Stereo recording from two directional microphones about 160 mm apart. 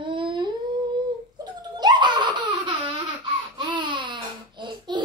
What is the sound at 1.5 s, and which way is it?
Laughter, 25° right (ahead or behind).